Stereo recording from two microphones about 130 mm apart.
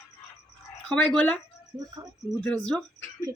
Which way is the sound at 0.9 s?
10° left (ahead or behind).